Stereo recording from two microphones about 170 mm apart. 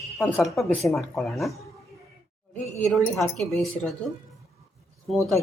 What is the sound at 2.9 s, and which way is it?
Speech, 5° left (ahead or behind).